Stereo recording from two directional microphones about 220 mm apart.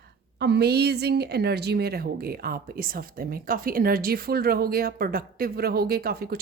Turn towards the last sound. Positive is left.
turn(degrees=-45)  # may be behind; listen again after turning